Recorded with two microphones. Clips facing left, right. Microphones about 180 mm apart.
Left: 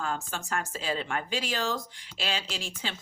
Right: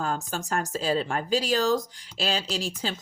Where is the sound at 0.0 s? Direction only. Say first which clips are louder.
Right 4 dB; 40° right (ahead or behind).